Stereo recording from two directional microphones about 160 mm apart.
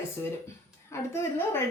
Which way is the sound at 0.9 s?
15° left (ahead or behind).